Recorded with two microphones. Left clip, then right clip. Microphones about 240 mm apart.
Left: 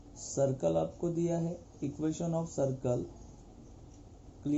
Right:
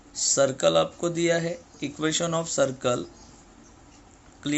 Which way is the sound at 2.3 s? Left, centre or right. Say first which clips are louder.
Right 9 dB; right.